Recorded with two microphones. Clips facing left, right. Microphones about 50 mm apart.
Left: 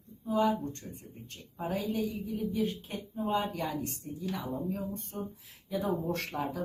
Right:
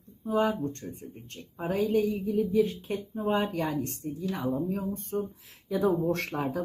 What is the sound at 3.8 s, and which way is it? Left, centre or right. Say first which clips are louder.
A woman's voice: right 4 dB; right.